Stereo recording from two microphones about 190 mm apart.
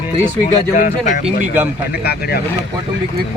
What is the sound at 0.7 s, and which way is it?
Speech, 45° left (ahead or behind).